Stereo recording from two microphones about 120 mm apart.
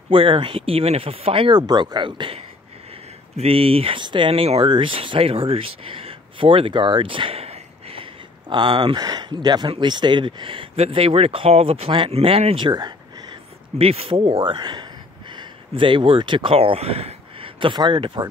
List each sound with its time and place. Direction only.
0.1 s speech: 50° right (ahead or behind)
13.7 s speech: 55° right (ahead or behind)